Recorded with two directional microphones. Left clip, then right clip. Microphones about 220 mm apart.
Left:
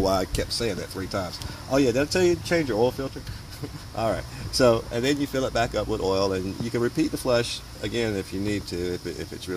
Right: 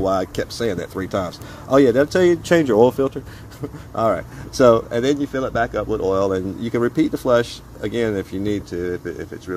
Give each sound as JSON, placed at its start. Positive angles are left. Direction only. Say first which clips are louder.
{"t": 0.0, "sound": "speech", "louder": "right 4 dB", "side_deg": 15}
{"t": 0.6, "sound": "speech", "louder": "right 5 dB", "side_deg": -5}
{"t": 2.5, "sound": "speech", "louder": "right 9 dB", "side_deg": -40}
{"t": 3.9, "sound": "speech", "louder": "right 7 dB", "side_deg": -10}
{"t": 5.3, "sound": "speech", "louder": "right 4 dB", "side_deg": 10}
{"t": 8.5, "sound": "speech", "louder": "right 5 dB", "side_deg": 10}